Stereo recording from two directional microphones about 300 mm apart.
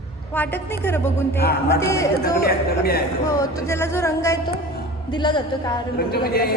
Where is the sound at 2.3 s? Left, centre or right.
Left.